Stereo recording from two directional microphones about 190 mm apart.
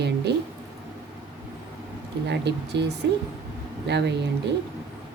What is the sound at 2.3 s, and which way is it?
Speech, 65° right (ahead or behind).